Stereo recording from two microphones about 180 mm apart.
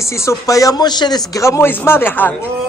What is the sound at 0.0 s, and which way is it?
A man's voice, 15° left (ahead or behind).